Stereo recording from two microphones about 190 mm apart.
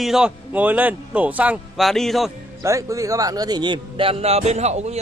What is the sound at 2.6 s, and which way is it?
Speech, 15° right (ahead or behind).